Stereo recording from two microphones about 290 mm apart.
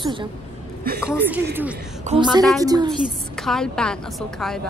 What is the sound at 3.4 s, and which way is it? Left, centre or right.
Speech, centre.